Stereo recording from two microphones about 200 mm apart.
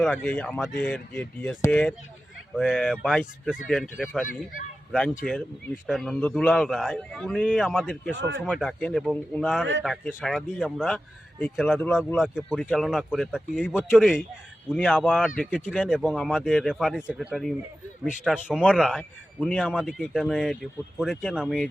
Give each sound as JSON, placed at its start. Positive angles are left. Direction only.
{"t": 0.0, "sound": "speech", "side_deg": 5}
{"t": 8.1, "sound": "speech", "side_deg": -60}
{"t": 8.4, "sound": "speech", "side_deg": 0}